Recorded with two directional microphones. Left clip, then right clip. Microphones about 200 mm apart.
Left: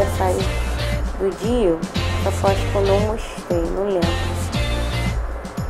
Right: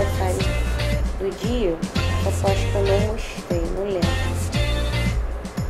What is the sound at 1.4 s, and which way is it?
Speech, 15° left (ahead or behind).